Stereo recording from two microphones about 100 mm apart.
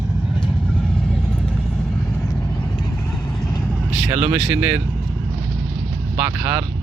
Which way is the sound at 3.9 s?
10° right (ahead or behind).